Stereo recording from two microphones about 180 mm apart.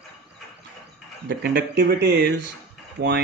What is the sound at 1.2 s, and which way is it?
Speech, 60° right (ahead or behind).